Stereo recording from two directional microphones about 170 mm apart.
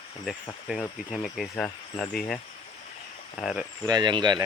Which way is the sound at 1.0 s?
Centre (ahead or behind).